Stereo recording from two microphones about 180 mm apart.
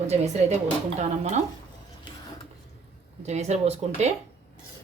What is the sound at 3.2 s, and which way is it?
Speech, 40° right (ahead or behind).